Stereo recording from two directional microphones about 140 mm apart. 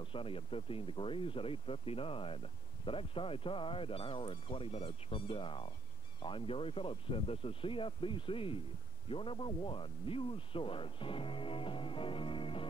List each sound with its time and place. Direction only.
0.0 s speech: 40° left (ahead or behind)